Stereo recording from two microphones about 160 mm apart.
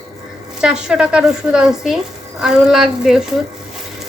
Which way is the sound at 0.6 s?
5° right (ahead or behind).